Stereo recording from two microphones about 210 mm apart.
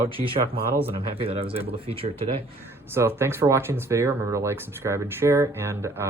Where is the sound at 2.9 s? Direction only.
10° right (ahead or behind).